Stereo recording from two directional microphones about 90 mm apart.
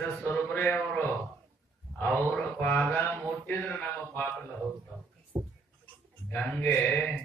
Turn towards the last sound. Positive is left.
turn(degrees=20)  # may be behind; listen again after turning